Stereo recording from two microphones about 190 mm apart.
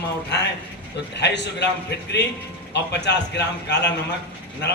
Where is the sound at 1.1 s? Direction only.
65° left (ahead or behind).